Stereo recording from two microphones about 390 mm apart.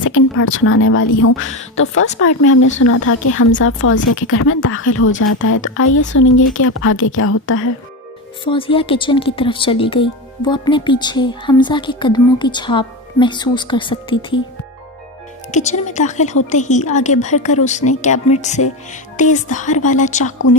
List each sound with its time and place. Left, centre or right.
0.0 s speech: left
8.4 s speech: centre
15.5 s a woman's voice: centre